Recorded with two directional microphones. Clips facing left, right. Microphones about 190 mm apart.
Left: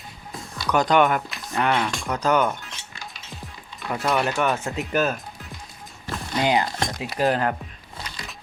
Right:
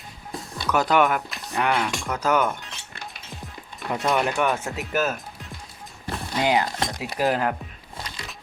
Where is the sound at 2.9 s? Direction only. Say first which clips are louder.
Right 3 dB; 60° right (ahead or behind).